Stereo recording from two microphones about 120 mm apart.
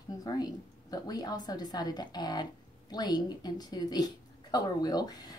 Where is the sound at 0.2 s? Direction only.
30° left (ahead or behind).